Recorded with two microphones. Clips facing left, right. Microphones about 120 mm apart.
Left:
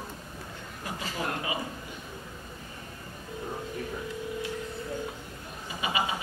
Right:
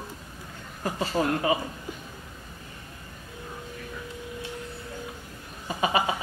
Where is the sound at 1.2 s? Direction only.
40° right (ahead or behind).